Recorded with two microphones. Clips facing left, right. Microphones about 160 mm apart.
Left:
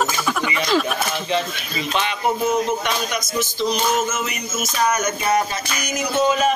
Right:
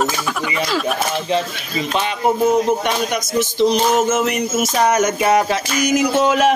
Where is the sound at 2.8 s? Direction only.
60° right (ahead or behind).